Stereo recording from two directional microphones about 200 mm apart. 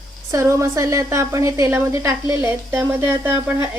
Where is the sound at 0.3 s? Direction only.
15° right (ahead or behind).